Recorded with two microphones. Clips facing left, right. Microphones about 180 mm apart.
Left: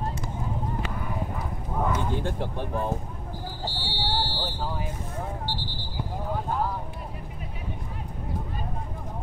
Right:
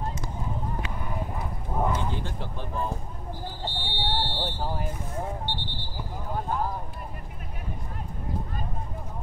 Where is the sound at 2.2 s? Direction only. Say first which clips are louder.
Left 6 dB; 55° left (ahead or behind).